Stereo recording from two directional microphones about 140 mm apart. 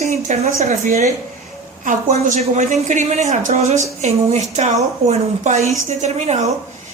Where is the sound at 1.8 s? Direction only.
65° right (ahead or behind).